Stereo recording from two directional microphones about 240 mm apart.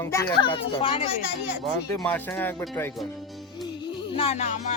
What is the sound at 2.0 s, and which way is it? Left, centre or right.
Speech, centre.